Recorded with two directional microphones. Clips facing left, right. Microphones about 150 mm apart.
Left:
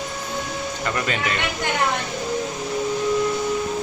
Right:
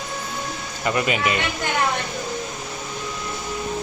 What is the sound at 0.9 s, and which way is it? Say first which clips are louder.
Speech: right 5 dB; 15° right (ahead or behind).